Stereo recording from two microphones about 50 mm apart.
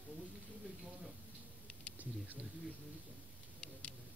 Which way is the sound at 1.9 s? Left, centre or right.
Right.